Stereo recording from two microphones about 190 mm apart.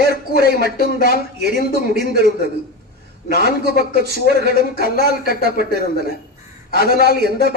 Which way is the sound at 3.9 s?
60° right (ahead or behind).